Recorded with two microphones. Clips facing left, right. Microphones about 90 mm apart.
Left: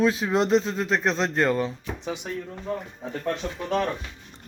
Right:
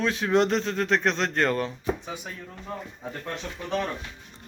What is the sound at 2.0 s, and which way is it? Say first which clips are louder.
Speech: left 5 dB; 75° left (ahead or behind).